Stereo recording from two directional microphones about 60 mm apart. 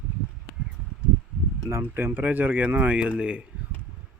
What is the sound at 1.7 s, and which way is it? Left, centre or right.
Speech, right.